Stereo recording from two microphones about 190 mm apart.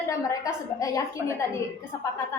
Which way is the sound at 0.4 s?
15° left (ahead or behind).